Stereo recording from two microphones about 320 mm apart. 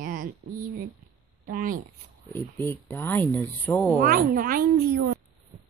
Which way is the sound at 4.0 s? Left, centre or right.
Right.